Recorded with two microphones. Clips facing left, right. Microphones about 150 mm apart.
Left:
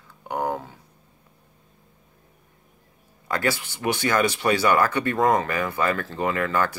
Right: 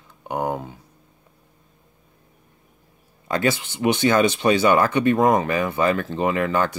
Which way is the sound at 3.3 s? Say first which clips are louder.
Right 3 dB; 20° right (ahead or behind).